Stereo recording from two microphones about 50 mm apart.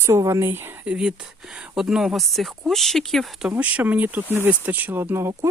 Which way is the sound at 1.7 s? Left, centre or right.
Centre.